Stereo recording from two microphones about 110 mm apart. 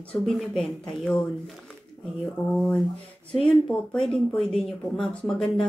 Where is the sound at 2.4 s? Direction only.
20° left (ahead or behind).